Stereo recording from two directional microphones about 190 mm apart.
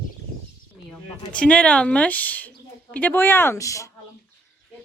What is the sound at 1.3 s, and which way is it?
Speech, 5° left (ahead or behind).